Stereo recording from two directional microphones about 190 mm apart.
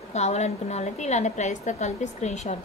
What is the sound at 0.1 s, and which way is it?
A woman's voice, 35° left (ahead or behind).